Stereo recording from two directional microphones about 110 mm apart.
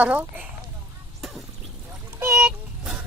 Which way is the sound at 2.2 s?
20° right (ahead or behind).